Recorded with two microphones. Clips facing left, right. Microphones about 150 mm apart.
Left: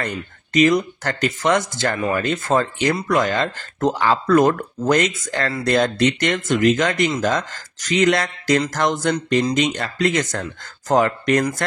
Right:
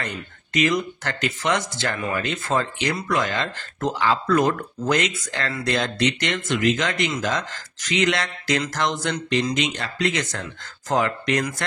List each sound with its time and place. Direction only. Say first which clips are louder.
0.0 s speech: left 5 dB; 40° left (ahead or behind)